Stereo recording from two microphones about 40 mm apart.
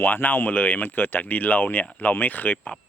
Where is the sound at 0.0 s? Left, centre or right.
Left.